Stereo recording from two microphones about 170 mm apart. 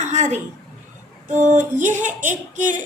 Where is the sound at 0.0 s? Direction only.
45° right (ahead or behind).